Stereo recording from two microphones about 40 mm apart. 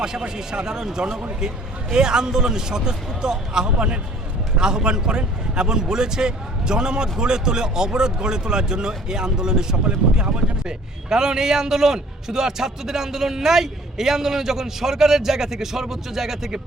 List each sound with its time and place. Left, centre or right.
0.0 s a man's voice: centre
9.7 s a man's voice: right; by 16.6 s centre